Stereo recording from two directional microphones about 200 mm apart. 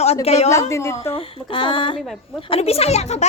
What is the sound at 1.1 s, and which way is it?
A woman's voice, 25° left (ahead or behind).